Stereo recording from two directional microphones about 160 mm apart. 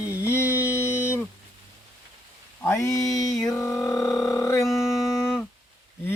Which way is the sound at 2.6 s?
20° left (ahead or behind).